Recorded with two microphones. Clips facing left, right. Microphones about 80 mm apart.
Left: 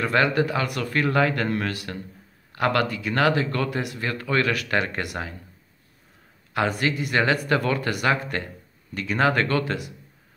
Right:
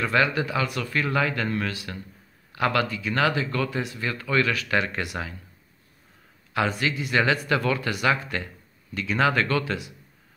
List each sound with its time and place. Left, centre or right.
0.0 s speech: left
6.5 s speech: left